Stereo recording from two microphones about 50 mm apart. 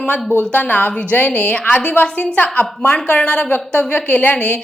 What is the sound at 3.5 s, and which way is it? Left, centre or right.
Speech, left.